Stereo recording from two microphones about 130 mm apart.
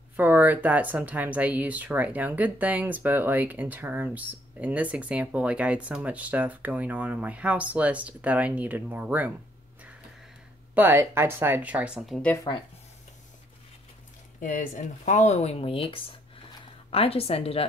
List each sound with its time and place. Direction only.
0.1 s speech: 15° right (ahead or behind)
10.7 s speech: 15° right (ahead or behind)
12.5 s speech: 35° left (ahead or behind)
14.4 s a woman's voice: 85° left; by 17.6 s 50° left (ahead or behind)